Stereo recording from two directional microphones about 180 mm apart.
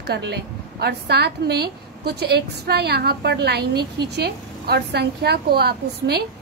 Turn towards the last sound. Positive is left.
turn(degrees=-65)  # may be behind; listen again after turning